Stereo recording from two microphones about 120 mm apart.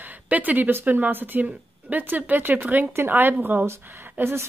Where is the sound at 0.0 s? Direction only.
15° right (ahead or behind).